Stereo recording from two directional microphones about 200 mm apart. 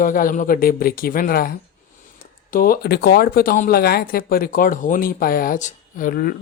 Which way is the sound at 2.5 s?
45° left (ahead or behind).